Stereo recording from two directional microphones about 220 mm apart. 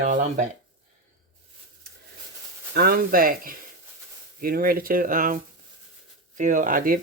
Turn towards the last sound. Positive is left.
turn(degrees=-40)  # may be behind; listen again after turning